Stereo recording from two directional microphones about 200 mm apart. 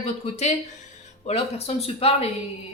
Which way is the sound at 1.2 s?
30° left (ahead or behind).